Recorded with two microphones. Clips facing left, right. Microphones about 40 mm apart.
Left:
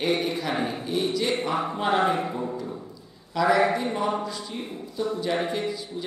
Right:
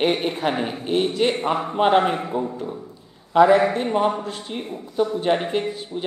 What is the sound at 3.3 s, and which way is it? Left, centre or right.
A man's voice, right.